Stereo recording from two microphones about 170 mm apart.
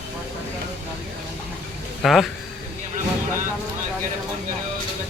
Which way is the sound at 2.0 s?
Centre (ahead or behind).